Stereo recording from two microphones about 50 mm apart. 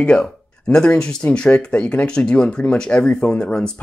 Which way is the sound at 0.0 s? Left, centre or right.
Centre.